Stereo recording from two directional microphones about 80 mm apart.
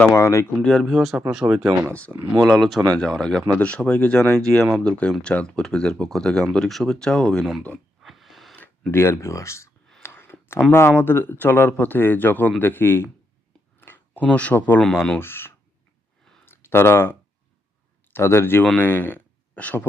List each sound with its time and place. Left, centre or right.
0.1 s speech: left
0.6 s speech: centre
0.9 s speech: centre
1.9 s speech: centre
2.4 s speech: centre
8.0 s a sound: centre
8.9 s speech: left
10.0 s a sound: left
10.7 s speech: left
13.7 s a sound: left
15.2 s speech: left